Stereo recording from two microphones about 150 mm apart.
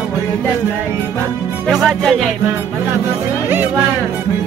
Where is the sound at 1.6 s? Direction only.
Centre (ahead or behind).